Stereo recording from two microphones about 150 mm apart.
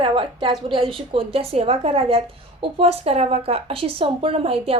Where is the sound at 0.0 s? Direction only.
35° right (ahead or behind).